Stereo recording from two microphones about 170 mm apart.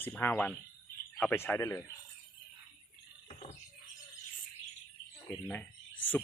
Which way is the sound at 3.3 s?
30° left (ahead or behind).